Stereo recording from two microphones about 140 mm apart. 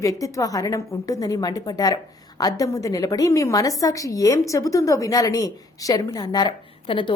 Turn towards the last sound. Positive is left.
turn(degrees=35)  # may be behind; listen again after turning